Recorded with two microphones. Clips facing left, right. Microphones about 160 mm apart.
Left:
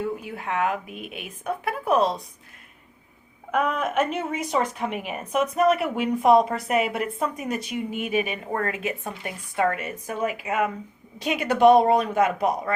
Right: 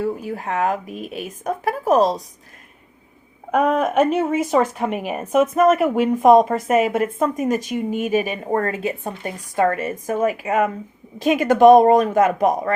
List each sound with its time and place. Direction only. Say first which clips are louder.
0.0 s speech: right 5 dB; 40° right (ahead or behind)
3.5 s a woman's voice: right 6 dB; 40° right (ahead or behind)